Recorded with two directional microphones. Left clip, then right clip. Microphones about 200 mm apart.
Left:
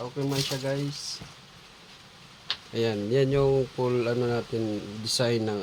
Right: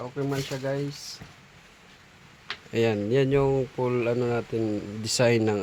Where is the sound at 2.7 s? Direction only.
30° right (ahead or behind).